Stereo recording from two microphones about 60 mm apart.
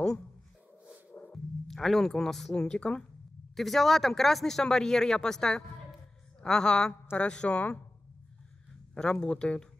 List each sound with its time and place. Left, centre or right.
1.1 s a sound: centre
1.7 s speech: centre
2.5 s speech: centre
3.5 s speech: centre
8.9 s speech: centre